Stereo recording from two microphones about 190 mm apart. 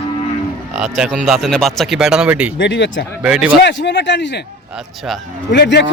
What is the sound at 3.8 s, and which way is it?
Speech, 65° left (ahead or behind).